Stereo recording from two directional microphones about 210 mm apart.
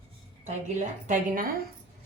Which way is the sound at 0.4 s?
35° right (ahead or behind).